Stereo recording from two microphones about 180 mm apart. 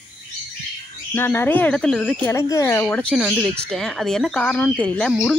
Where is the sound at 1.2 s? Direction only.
15° left (ahead or behind).